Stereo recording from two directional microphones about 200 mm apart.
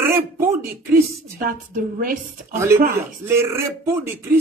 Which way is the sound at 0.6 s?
45° right (ahead or behind).